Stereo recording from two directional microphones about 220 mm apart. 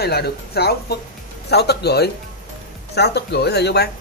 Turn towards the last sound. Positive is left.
turn(degrees=50)  # may be behind; listen again after turning